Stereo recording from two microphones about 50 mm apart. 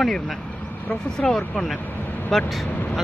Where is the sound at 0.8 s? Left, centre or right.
Centre.